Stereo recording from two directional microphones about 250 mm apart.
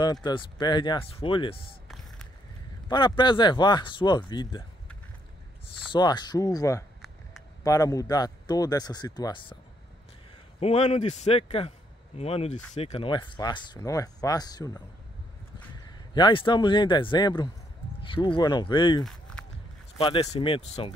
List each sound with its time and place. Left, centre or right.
0.0 s a man's voice: centre
2.9 s a man's voice: centre
5.9 s a man's voice: centre
10.6 s speech: left
16.2 s speech: centre
19.0 s a sound: centre
20.0 s speech: left